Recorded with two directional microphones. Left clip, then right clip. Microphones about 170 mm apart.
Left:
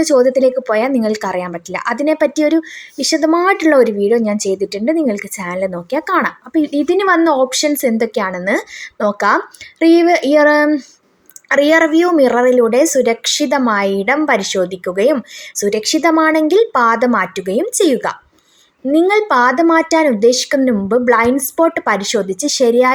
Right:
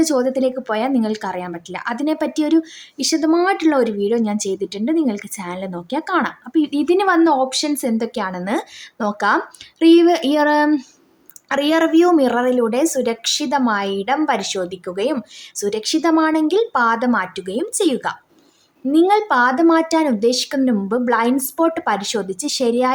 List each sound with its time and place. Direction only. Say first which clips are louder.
0.0 s a woman's voice: left 6 dB; centre (ahead or behind)